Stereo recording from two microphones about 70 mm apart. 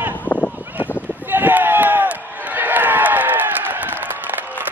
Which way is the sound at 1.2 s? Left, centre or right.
Right.